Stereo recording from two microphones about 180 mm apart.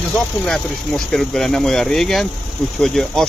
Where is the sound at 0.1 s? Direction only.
Centre (ahead or behind).